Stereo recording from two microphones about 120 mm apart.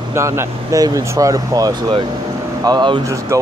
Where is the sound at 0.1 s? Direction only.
25° right (ahead or behind).